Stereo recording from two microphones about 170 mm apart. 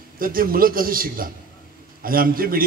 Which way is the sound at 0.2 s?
55° right (ahead or behind).